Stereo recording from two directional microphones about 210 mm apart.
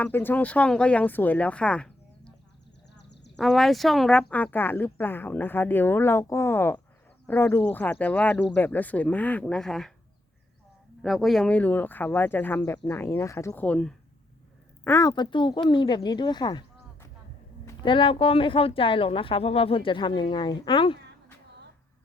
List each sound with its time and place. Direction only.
0.0 s speech: 10° left (ahead or behind)
2.9 s a sound: 55° left (ahead or behind)
3.3 s speech: centre (ahead or behind)
11.0 s speech: centre (ahead or behind); by 21.0 s 25° left (ahead or behind)